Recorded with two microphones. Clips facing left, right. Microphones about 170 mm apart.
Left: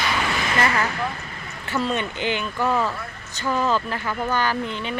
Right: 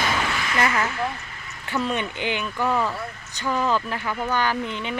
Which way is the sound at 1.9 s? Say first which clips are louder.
Left 2 dB; 15° right (ahead or behind).